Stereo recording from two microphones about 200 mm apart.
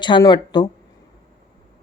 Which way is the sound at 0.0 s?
20° left (ahead or behind).